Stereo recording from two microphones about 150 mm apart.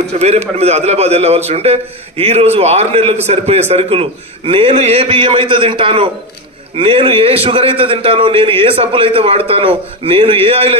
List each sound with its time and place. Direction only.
0.2 s a man's voice: 45° right (ahead or behind)